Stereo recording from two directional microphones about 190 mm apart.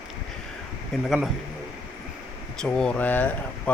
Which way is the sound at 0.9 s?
Centre (ahead or behind).